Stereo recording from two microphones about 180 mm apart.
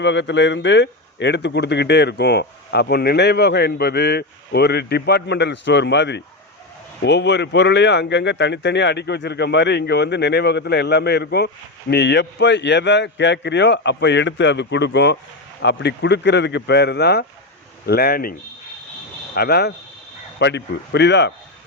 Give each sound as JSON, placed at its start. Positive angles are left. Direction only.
{"t": 0.0, "sound": "speech", "side_deg": 75}
{"t": 19.4, "sound": "speech", "side_deg": 65}